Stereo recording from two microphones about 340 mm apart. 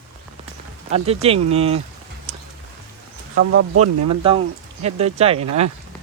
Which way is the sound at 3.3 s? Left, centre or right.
Right.